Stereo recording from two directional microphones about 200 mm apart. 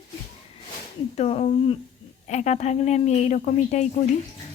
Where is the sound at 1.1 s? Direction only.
30° left (ahead or behind).